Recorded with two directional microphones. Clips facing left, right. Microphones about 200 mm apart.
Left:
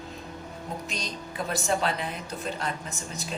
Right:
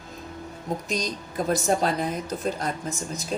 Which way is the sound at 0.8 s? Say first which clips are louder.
Right 6 dB; 40° right (ahead or behind).